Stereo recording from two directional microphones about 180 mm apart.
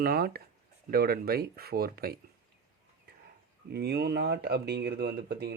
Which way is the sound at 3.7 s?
65° right (ahead or behind).